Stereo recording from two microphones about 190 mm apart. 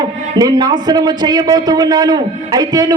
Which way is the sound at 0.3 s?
20° right (ahead or behind).